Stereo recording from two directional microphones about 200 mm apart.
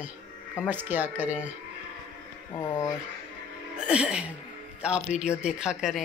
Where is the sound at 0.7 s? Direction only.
10° right (ahead or behind).